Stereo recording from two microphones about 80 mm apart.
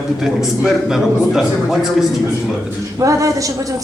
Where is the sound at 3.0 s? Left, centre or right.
Right.